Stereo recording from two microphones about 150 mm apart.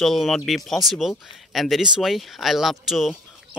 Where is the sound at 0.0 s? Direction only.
Centre (ahead or behind).